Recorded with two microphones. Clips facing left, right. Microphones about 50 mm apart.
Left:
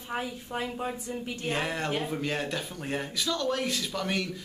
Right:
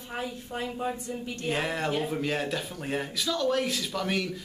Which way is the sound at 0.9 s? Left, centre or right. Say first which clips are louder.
Right 1 dB; centre.